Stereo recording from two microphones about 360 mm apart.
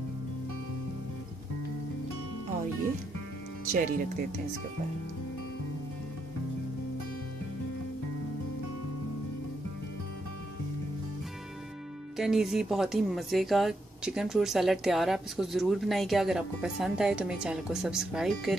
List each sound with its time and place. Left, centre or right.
3.7 s speech: right
12.2 s speech: centre